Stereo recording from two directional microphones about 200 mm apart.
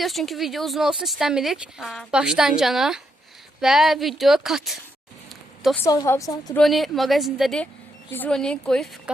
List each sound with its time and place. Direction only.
0.0 s speech: centre (ahead or behind)
5.8 s a woman's voice: 15° left (ahead or behind)
6.6 s speech: centre (ahead or behind)